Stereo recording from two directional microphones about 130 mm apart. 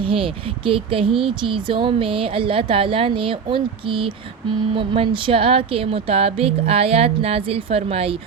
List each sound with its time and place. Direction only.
0.0 s speech: 45° right (ahead or behind)